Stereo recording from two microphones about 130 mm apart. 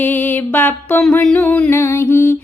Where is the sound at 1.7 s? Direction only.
20° left (ahead or behind).